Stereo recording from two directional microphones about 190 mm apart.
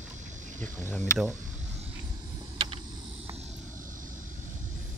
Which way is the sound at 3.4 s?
35° right (ahead or behind).